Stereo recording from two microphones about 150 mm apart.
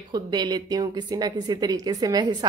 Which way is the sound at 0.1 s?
30° right (ahead or behind).